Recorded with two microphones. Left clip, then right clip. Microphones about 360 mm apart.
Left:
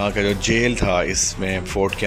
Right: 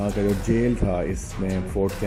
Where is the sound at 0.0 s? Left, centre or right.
Left.